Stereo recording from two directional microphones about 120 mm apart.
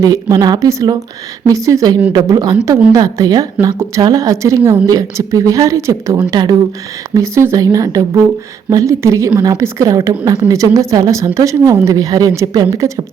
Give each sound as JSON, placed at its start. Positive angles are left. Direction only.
{"t": 0.0, "sound": "a woman's voice", "side_deg": -30}